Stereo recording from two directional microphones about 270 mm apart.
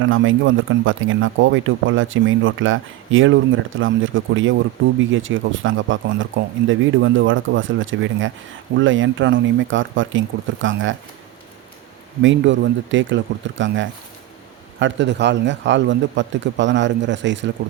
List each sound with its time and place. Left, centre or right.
0.0 s speech: right
12.2 s a man's voice: right